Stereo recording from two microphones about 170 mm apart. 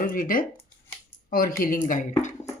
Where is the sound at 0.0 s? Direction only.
55° left (ahead or behind).